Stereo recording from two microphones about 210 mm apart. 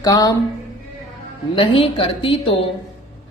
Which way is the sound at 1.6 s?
25° left (ahead or behind).